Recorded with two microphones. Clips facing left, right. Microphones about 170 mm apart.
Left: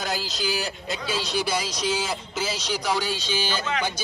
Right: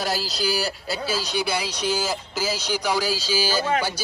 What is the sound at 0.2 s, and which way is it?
Speech, 35° right (ahead or behind).